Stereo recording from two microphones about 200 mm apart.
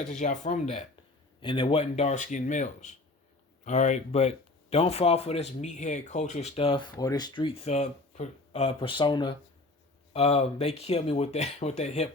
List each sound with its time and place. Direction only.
0.1 s speech: 35° left (ahead or behind)